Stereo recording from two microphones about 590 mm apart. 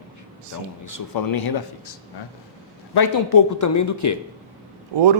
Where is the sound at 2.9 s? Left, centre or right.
Left.